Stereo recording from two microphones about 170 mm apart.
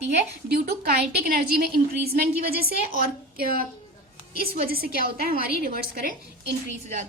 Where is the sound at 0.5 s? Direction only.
65° right (ahead or behind).